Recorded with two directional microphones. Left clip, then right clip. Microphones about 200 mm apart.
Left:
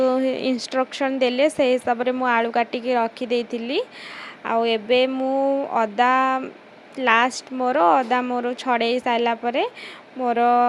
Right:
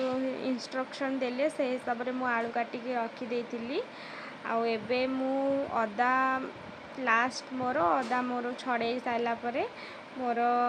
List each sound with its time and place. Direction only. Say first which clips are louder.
0.0 s a woman's voice: left 12 dB; 40° left (ahead or behind)